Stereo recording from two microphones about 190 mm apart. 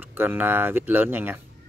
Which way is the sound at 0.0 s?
10° right (ahead or behind).